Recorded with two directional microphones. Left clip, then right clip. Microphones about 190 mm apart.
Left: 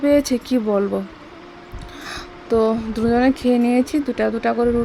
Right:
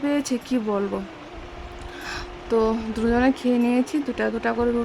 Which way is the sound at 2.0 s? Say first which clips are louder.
Left 4 dB; 15° left (ahead or behind).